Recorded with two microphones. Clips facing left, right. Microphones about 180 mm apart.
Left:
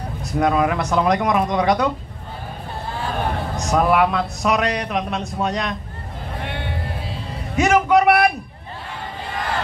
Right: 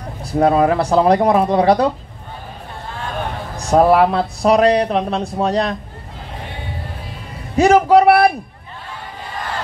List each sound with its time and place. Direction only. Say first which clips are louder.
0.2 s a man's voice: right 5 dB; 30° right (ahead or behind)
3.5 s a man's voice: right 6 dB; 30° right (ahead or behind)
6.4 s vehicle: left 4 dB; 70° left (ahead or behind)
7.5 s a man's voice: right 5 dB; 30° right (ahead or behind)